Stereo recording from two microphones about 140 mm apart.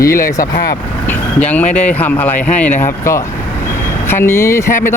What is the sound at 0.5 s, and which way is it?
Speech, 90° left.